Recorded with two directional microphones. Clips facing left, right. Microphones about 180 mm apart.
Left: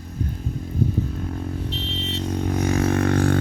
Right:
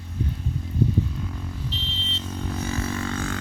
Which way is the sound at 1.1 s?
50° left (ahead or behind).